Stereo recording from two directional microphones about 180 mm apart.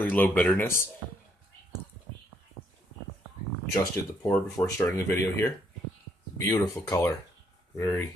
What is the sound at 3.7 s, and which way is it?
Speech, 15° left (ahead or behind).